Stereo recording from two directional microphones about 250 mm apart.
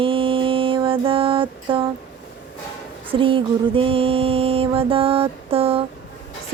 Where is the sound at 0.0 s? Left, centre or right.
Right.